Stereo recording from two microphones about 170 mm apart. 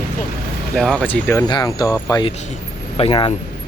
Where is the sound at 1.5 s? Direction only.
25° left (ahead or behind).